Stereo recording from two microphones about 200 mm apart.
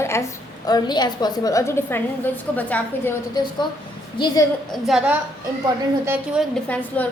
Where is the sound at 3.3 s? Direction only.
20° left (ahead or behind).